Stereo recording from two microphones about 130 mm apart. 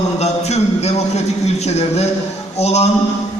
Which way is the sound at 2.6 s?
55° left (ahead or behind).